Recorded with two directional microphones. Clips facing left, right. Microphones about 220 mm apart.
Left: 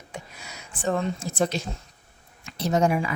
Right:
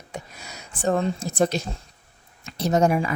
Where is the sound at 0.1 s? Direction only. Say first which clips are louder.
Right 3 dB; 40° right (ahead or behind).